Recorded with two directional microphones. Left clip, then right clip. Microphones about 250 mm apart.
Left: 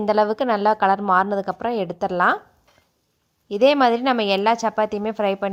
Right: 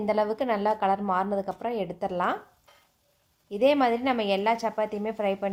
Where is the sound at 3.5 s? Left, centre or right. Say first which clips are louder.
Left 6 dB; left.